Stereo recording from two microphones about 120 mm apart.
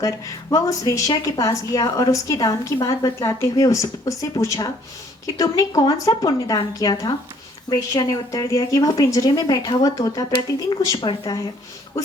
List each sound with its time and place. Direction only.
0.5 s a woman's voice: 30° left (ahead or behind)